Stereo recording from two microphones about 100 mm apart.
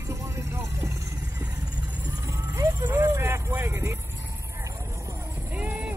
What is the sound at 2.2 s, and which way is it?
Vehicle, 30° right (ahead or behind).